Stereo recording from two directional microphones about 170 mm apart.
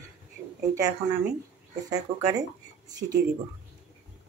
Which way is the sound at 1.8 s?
20° right (ahead or behind).